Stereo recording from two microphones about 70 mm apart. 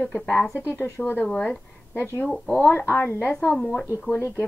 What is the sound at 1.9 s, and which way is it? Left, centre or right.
A woman's voice, left.